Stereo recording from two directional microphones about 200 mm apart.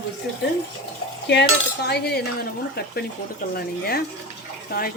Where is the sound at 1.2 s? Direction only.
55° left (ahead or behind).